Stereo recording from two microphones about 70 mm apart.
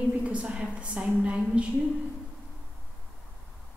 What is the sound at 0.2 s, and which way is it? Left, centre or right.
A woman's voice, centre.